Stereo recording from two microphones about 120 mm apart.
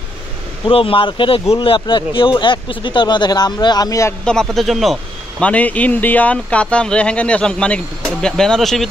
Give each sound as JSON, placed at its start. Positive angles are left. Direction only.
{"t": 0.7, "sound": "speech", "side_deg": 50}
{"t": 4.2, "sound": "speech", "side_deg": 5}
{"t": 5.4, "sound": "speech", "side_deg": 10}